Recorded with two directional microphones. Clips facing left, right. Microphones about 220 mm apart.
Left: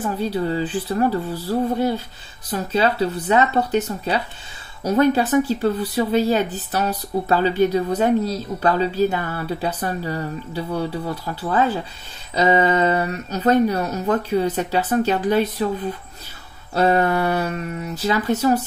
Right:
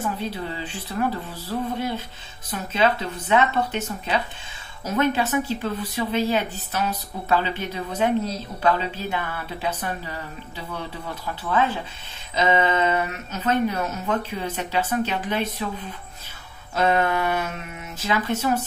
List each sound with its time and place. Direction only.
0.0 s speech: 40° left (ahead or behind)
16.7 s speech: 35° left (ahead or behind)